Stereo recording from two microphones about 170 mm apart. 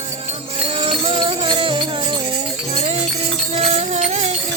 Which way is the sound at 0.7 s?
30° right (ahead or behind).